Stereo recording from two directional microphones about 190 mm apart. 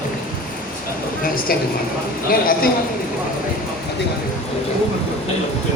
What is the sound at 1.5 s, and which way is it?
A man's voice, 50° left (ahead or behind).